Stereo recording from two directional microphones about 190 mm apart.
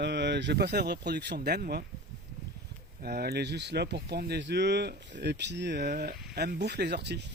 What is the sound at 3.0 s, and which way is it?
Speech, 55° right (ahead or behind).